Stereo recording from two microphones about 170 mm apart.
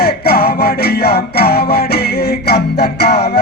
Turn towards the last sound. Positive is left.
turn(degrees=70)  # may be behind; listen again after turning